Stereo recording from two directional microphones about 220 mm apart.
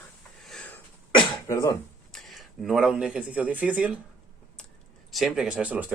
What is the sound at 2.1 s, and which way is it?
Speech, centre (ahead or behind).